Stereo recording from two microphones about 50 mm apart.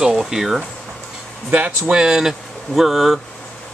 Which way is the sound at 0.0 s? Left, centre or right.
Centre.